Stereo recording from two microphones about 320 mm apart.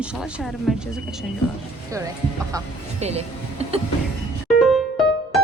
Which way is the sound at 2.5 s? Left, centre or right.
Centre.